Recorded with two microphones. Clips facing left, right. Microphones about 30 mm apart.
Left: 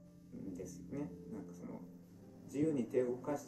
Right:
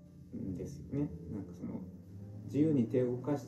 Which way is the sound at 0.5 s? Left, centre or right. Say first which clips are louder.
Right 5 dB; right.